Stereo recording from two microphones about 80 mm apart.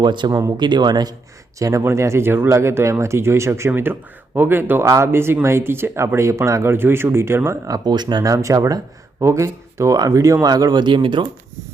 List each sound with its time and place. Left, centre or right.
0.0 s speech: right
0.3 s speech: right
0.5 s speech: right
1.5 s speech: right
7.7 s speech: right
8.3 s speech: right